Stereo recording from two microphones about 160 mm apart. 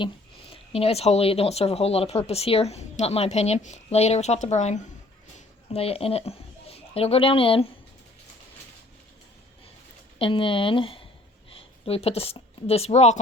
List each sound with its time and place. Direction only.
0.5 s a child's voice: 40° left (ahead or behind)
10.2 s speech: 30° left (ahead or behind)